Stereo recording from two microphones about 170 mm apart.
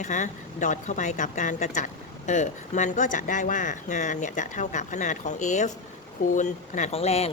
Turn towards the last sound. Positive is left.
turn(degrees=35)  # may be behind; listen again after turning